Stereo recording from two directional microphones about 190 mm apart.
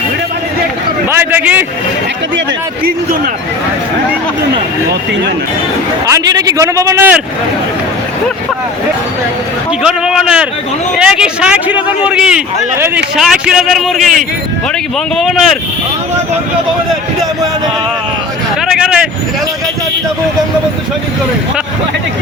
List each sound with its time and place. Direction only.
1.1 s a man's voice: 10° right (ahead or behind)
6.1 s a man's voice: 20° right (ahead or behind)
9.8 s a man's voice: 5° right (ahead or behind)
15.1 s a man's voice: centre (ahead or behind)
18.6 s vehicle: centre (ahead or behind)